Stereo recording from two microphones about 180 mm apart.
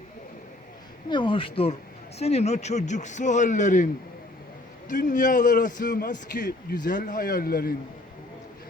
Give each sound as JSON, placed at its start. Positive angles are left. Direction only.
{"t": 1.1, "sound": "a man's voice", "side_deg": 25}
{"t": 4.9, "sound": "a man's voice", "side_deg": 45}